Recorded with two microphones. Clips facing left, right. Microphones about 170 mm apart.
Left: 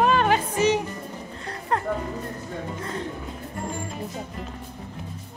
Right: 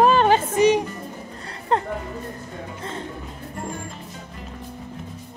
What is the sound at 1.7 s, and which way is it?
Music, 25° right (ahead or behind).